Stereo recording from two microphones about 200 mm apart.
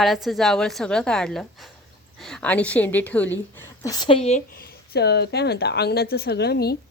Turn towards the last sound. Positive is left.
turn(degrees=55)  # may be behind; listen again after turning